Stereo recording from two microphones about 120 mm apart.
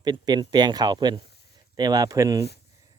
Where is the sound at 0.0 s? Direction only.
35° right (ahead or behind).